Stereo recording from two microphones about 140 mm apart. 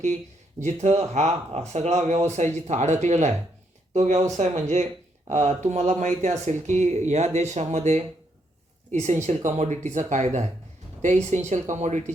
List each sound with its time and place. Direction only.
0.6 s speech: 55° right (ahead or behind)